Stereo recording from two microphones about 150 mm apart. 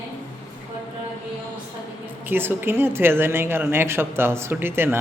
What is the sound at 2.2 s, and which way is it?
A woman's voice, 15° right (ahead or behind).